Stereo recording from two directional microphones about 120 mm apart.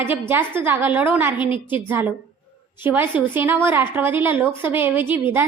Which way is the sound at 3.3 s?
15° right (ahead or behind).